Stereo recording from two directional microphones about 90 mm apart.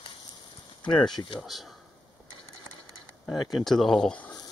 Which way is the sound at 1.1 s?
60° left (ahead or behind).